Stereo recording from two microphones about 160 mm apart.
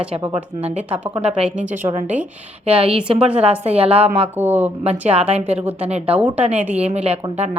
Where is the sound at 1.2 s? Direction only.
40° right (ahead or behind).